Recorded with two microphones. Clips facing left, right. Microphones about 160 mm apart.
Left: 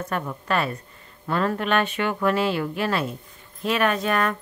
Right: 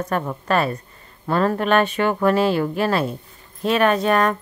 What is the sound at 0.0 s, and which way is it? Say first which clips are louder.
A woman's voice: right 5 dB; 45° right (ahead or behind).